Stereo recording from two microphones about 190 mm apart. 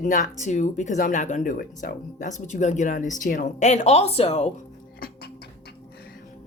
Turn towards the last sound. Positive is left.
turn(degrees=35)  # may be behind; listen again after turning